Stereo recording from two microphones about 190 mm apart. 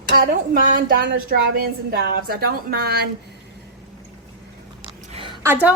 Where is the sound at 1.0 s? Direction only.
55° right (ahead or behind).